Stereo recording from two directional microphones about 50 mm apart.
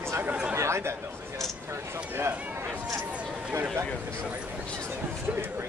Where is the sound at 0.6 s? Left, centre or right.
Right.